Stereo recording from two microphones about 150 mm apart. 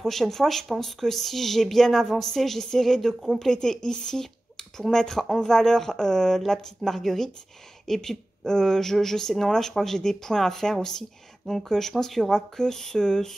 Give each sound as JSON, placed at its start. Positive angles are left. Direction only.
{"t": 0.0, "sound": "speech", "side_deg": 0}